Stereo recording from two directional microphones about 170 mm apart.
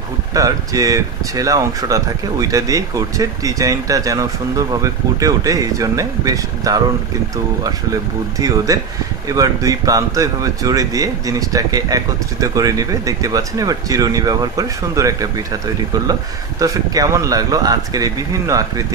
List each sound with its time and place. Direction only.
0.3 s speech: 20° right (ahead or behind)
8.4 s speech: 20° right (ahead or behind)